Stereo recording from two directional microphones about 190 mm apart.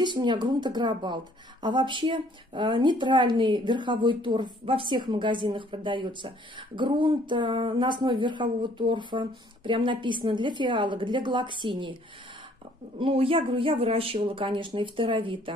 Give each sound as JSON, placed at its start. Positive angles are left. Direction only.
{"t": 0.0, "sound": "a woman's voice", "side_deg": -25}
{"t": 13.0, "sound": "a woman's voice", "side_deg": -30}